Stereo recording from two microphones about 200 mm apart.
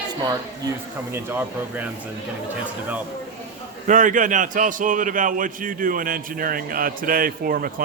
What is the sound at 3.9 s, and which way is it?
A man's voice, 40° right (ahead or behind).